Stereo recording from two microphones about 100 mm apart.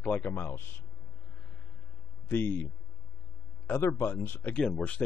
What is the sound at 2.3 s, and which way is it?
Speech, 20° left (ahead or behind).